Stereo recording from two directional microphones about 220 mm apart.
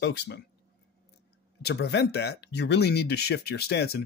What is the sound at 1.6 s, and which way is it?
Speech, 50° left (ahead or behind).